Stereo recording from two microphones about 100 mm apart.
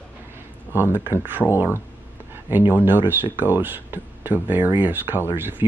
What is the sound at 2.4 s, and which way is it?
Speech, 20° right (ahead or behind).